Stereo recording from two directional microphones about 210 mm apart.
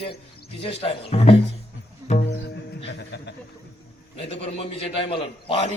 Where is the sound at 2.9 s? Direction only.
55° left (ahead or behind).